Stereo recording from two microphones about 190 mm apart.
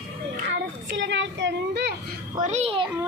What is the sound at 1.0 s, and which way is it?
Speech, 70° right (ahead or behind).